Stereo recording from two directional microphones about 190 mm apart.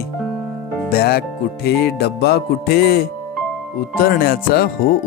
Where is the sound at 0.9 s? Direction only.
55° left (ahead or behind).